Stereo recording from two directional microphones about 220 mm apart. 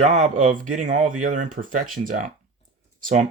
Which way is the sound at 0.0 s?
35° right (ahead or behind).